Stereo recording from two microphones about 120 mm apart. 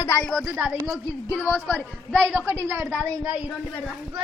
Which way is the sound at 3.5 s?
5° left (ahead or behind).